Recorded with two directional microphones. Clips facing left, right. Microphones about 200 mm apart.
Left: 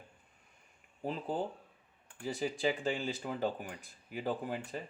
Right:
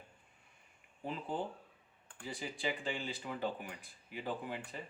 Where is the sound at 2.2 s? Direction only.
45° left (ahead or behind).